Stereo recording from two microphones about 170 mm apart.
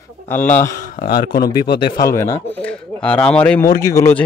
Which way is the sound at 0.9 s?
55° left (ahead or behind).